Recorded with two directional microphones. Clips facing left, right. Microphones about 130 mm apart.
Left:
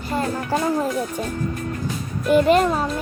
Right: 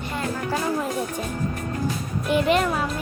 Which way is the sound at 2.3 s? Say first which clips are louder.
Left 5 dB; 40° left (ahead or behind).